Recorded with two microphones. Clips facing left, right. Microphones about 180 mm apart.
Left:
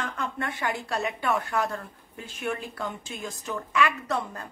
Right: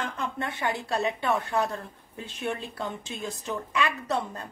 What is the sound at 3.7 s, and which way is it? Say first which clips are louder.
Speech: left 3 dB; 35° right (ahead or behind).